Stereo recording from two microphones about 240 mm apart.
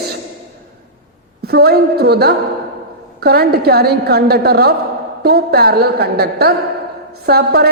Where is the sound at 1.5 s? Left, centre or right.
Right.